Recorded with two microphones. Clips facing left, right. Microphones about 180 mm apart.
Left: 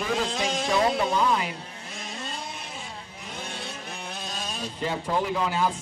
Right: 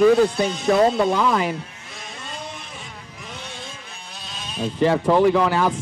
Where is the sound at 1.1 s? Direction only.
70° right (ahead or behind).